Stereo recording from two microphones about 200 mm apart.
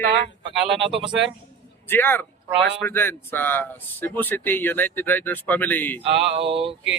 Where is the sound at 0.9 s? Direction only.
25° right (ahead or behind).